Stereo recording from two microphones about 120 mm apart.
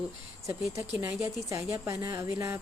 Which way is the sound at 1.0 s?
25° right (ahead or behind).